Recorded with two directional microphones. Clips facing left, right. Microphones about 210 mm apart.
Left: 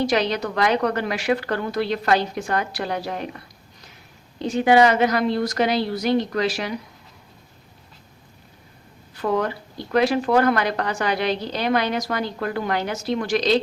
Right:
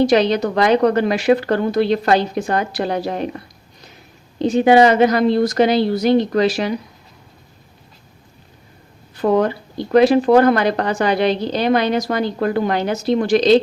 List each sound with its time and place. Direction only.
0.0 s a woman's voice: 25° right (ahead or behind)
4.4 s a woman's voice: 25° right (ahead or behind)
9.2 s a woman's voice: 30° right (ahead or behind)